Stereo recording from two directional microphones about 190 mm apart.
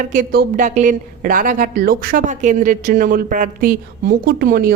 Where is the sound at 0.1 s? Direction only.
50° right (ahead or behind).